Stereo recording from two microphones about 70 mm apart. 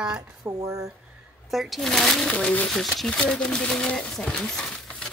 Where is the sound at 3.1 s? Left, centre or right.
Centre.